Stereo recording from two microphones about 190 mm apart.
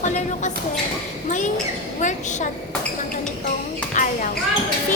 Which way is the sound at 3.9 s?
45° left (ahead or behind).